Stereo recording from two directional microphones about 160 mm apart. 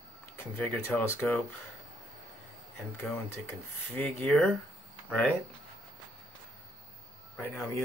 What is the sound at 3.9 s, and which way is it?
Speech, 5° left (ahead or behind).